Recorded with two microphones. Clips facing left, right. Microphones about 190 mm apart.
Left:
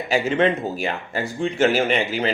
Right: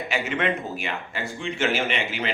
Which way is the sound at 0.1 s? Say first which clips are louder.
Left 7 dB; 35° left (ahead or behind).